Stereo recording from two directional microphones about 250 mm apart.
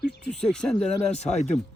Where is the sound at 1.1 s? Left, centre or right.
Left.